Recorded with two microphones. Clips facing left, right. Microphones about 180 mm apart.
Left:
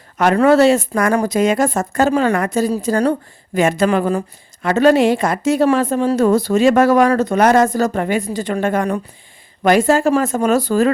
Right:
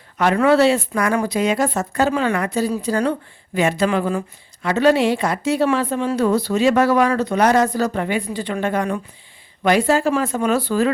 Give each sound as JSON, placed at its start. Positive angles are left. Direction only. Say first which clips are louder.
{"t": 0.2, "sound": "a woman's voice", "louder": "left 3 dB", "side_deg": 45}